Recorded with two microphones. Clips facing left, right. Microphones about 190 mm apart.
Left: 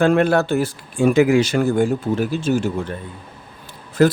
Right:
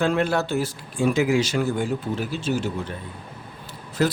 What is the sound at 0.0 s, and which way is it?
Speech, 55° left (ahead or behind).